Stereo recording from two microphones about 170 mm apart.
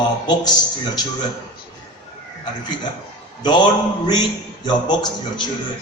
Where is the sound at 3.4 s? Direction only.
25° left (ahead or behind).